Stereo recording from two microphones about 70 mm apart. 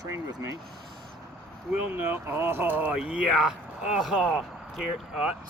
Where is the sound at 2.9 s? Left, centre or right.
Centre.